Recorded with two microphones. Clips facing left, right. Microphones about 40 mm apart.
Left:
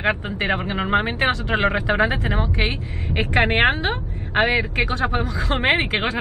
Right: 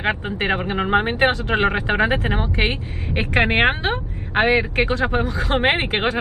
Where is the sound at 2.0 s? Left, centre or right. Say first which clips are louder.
Right 1 dB; right.